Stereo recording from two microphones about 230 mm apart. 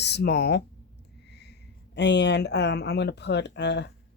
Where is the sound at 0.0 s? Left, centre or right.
Left.